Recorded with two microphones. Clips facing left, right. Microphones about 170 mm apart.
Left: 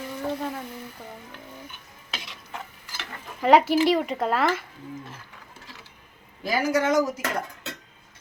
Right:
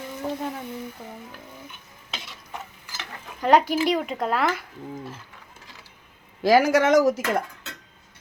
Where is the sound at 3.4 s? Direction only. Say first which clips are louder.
Left 1 dB; 5° left (ahead or behind).